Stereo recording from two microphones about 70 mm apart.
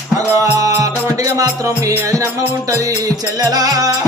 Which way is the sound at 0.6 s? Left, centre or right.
Right.